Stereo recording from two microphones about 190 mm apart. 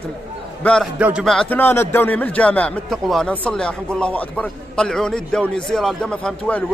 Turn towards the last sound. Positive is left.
turn(degrees=5)  # may be behind; listen again after turning